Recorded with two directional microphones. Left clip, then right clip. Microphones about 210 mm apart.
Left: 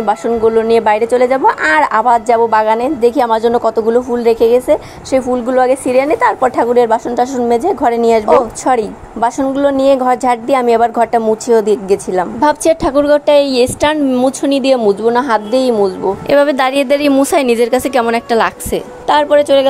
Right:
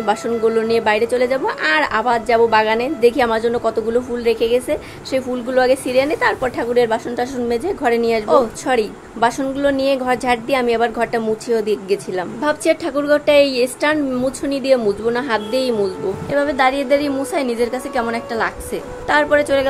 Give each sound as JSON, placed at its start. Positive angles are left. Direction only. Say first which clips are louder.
{"t": 0.0, "sound": "speech", "louder": "left 5 dB", "side_deg": 15}
{"t": 16.3, "sound": "a woman's voice", "louder": "left 5 dB", "side_deg": 45}
{"t": 19.0, "sound": "speech", "louder": "left 5 dB", "side_deg": 20}